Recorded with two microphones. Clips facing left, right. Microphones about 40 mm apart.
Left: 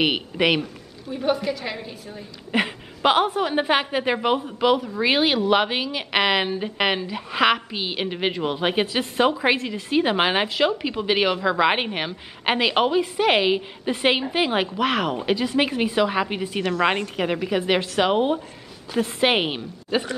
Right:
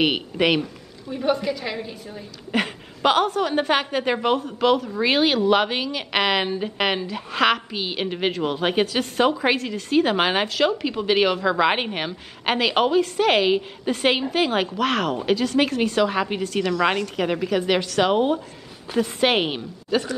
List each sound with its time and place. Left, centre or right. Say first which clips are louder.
0.0 s a woman's voice: even; centre
16.8 s a woman's voice: left 1 dB; left
17.2 s a woman's voice: right 2 dB; centre
19.9 s a woman's voice: right 1 dB; left